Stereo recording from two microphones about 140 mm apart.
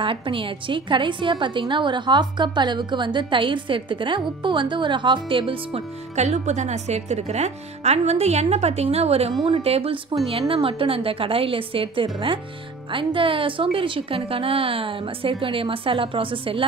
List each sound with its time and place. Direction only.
0.0 s a woman's voice: 40° right (ahead or behind)
6.1 s a woman's voice: 55° right (ahead or behind); by 16.6 s 40° right (ahead or behind)